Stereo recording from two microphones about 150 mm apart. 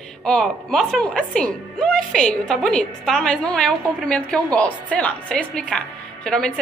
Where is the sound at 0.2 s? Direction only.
5° left (ahead or behind).